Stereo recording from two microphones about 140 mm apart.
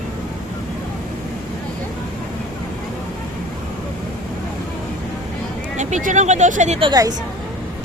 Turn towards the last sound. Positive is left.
turn(degrees=-30)  # may be behind; listen again after turning